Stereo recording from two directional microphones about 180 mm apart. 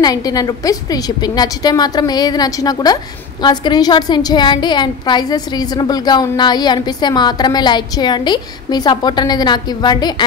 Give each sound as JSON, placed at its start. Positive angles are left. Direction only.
{"t": 0.0, "sound": "a woman's voice", "side_deg": 20}